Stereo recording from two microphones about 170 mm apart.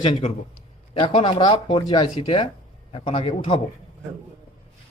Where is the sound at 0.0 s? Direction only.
35° left (ahead or behind).